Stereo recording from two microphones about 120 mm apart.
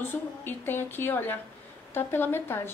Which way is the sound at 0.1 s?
15° left (ahead or behind).